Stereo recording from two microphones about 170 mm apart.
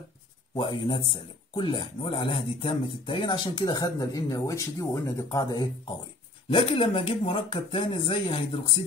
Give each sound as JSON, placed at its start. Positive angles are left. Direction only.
{"t": 0.6, "sound": "speech", "side_deg": 35}